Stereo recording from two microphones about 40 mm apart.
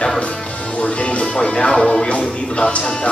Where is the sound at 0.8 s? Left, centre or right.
Left; by 2.1 s centre.